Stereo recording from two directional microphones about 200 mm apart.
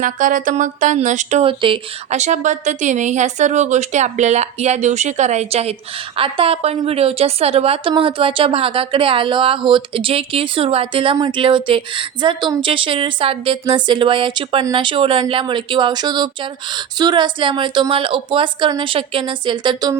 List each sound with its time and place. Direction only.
0.0 s a woman's voice: 40° right (ahead or behind); by 20.0 s 20° right (ahead or behind)